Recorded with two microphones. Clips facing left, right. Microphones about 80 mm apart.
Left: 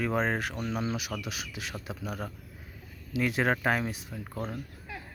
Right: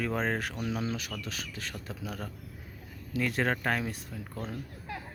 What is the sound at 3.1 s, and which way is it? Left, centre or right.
Speech, centre.